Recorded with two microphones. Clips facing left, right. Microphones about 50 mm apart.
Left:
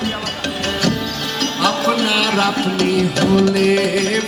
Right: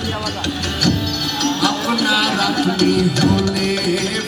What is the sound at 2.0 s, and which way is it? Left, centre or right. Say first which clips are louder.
Music: left 1 dB; left.